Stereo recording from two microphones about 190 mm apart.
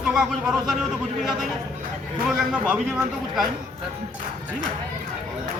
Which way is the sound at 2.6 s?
10° right (ahead or behind).